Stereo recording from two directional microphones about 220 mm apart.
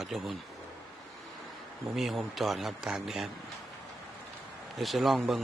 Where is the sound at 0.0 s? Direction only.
Centre (ahead or behind).